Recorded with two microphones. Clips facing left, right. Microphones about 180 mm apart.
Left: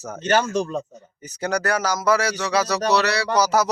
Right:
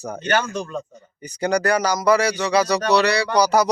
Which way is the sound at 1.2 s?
5° left (ahead or behind).